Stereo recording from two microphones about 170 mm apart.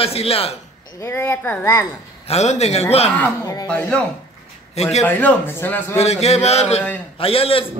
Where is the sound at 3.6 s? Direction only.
5° left (ahead or behind).